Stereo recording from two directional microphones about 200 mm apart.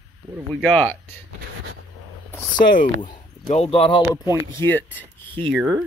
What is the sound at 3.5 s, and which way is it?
Speech, 30° left (ahead or behind).